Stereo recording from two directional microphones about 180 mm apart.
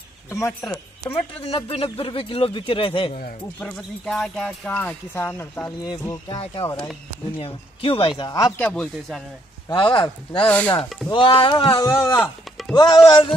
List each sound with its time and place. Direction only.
0.3 s speech: 10° left (ahead or behind)
1.4 s speech: 30° left (ahead or behind)
3.5 s speech: 5° left (ahead or behind)
7.3 s speech: 30° left (ahead or behind)
8.5 s speech: 5° left (ahead or behind)
9.8 s speech: 30° left (ahead or behind)
10.4 s speech: 10° left (ahead or behind)
11.1 s speech: 30° left (ahead or behind)
12.2 s speech: centre (ahead or behind)
12.7 s speech: 25° left (ahead or behind)